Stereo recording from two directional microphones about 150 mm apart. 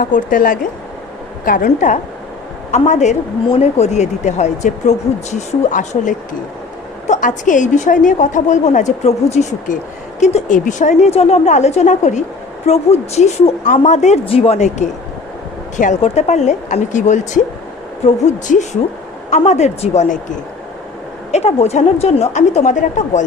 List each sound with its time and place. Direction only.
0.0 s a woman's voice: 60° left (ahead or behind)
16.0 s a woman's voice: 45° left (ahead or behind)
21.3 s a woman's voice: 45° left (ahead or behind)